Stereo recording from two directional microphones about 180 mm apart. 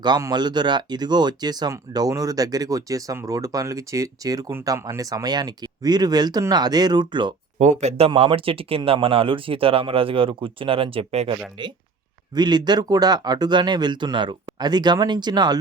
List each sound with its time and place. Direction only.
0.0 s speech: 25° right (ahead or behind)
7.6 s speech: 40° right (ahead or behind)